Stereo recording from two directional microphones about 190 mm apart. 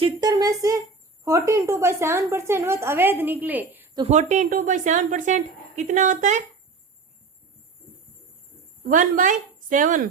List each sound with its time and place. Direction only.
0.2 s a woman's voice: 20° right (ahead or behind)
3.9 s speech: 35° right (ahead or behind)
8.8 s a woman's voice: 45° right (ahead or behind)